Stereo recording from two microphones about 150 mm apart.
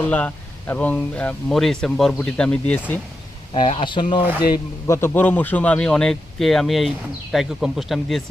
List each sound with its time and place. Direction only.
0.1 s speech: 10° left (ahead or behind)
3.5 s speech: 40° left (ahead or behind)
4.5 s speech: 20° left (ahead or behind); by 8.2 s centre (ahead or behind)